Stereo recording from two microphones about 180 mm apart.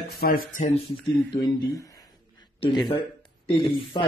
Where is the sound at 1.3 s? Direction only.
25° left (ahead or behind).